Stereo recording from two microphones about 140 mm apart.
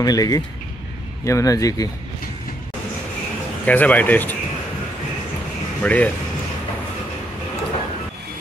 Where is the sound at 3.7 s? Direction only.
10° left (ahead or behind).